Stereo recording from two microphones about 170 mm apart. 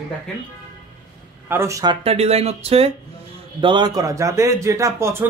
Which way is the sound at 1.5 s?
15° right (ahead or behind).